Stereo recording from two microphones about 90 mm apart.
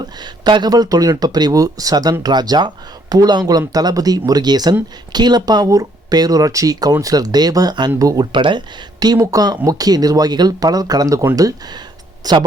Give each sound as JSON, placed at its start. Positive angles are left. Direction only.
{"t": 0.0, "sound": "speech", "side_deg": -55}
{"t": 9.1, "sound": "speech", "side_deg": -40}